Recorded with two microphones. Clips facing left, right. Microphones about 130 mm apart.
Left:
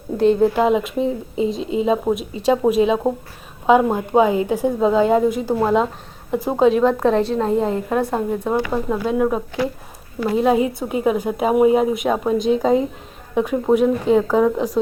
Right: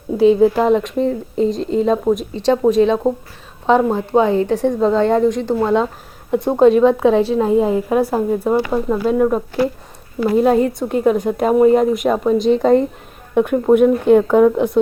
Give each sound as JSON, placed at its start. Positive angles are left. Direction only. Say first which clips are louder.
{"t": 0.2, "sound": "a woman's voice", "louder": "right 3 dB", "side_deg": 0}